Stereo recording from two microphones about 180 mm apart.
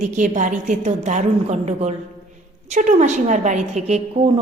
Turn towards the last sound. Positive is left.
turn(degrees=-35)  # may be behind; listen again after turning